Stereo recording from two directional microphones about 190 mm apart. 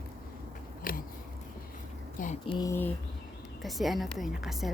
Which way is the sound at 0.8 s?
50° left (ahead or behind).